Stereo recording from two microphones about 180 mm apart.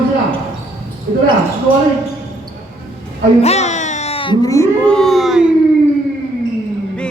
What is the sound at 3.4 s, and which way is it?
Music, 35° left (ahead or behind).